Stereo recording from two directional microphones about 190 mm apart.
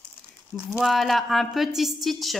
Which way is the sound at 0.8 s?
Centre (ahead or behind).